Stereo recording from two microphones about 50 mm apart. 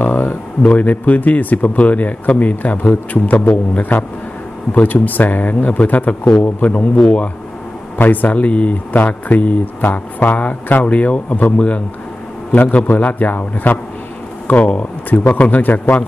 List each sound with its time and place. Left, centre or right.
0.0 s a sound: left
0.6 s a man's voice: left
7.0 s speech: centre
8.0 s a man's voice: left
15.0 s a man's voice: left